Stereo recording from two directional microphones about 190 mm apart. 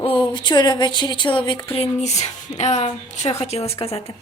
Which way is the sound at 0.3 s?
25° left (ahead or behind).